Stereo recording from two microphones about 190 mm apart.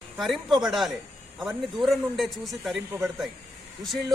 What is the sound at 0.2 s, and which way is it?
A man's voice, centre (ahead or behind).